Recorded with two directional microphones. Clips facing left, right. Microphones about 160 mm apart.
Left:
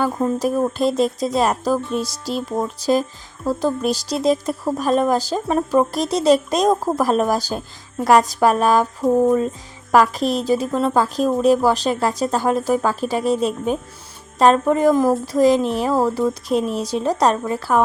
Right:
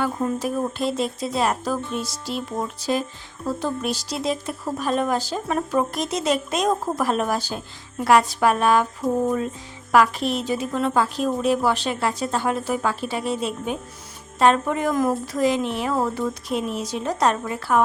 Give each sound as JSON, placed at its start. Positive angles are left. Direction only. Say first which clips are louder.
{"t": 0.0, "sound": "speech", "louder": "left 4 dB", "side_deg": 40}